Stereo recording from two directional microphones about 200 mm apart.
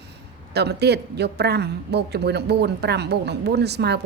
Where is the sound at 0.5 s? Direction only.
55° right (ahead or behind).